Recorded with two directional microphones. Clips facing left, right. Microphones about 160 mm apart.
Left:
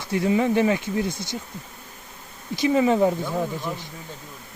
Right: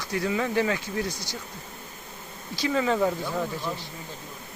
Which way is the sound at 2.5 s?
20° left (ahead or behind).